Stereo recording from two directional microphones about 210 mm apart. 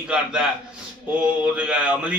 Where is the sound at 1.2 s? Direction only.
5° right (ahead or behind).